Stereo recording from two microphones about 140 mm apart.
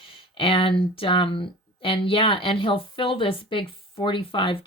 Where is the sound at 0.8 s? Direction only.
40° left (ahead or behind).